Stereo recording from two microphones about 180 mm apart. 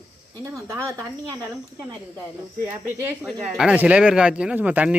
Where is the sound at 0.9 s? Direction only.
15° right (ahead or behind).